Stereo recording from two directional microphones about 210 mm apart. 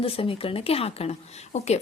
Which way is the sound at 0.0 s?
25° left (ahead or behind).